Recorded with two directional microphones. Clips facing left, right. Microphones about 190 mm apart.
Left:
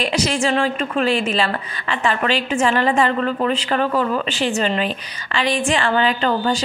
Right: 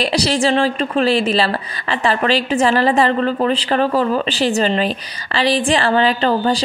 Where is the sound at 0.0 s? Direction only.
35° right (ahead or behind).